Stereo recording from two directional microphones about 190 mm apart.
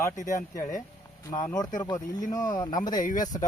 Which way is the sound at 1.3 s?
15° left (ahead or behind).